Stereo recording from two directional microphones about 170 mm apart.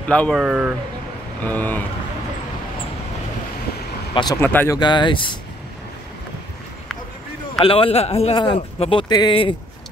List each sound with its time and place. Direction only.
0.1 s speech: 5° left (ahead or behind)
0.4 s speech: 5° right (ahead or behind)
1.4 s speech: 10° left (ahead or behind)
4.1 s speech: 25° left (ahead or behind)
4.4 s speech: 10° left (ahead or behind)
4.7 s speech: 25° left (ahead or behind)
7.6 s speech: 35° left (ahead or behind)